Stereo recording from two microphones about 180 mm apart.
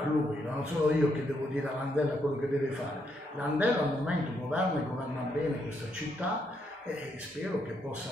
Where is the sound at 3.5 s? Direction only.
10° right (ahead or behind).